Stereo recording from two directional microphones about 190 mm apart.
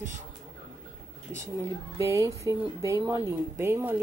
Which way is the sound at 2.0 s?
15° right (ahead or behind).